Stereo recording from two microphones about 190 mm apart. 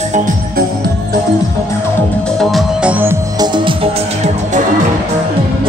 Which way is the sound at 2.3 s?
Centre (ahead or behind).